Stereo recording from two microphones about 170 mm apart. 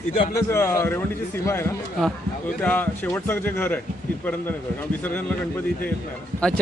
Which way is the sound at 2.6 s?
10° left (ahead or behind).